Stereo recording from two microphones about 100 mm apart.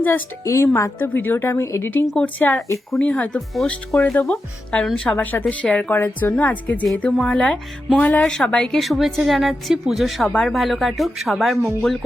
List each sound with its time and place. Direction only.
0.0 s a woman's voice: 25° left (ahead or behind)
2.0 s a woman's voice: 10° left (ahead or behind)